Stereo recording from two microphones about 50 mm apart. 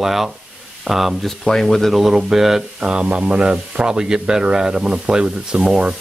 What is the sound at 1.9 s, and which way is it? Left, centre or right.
Speech, centre.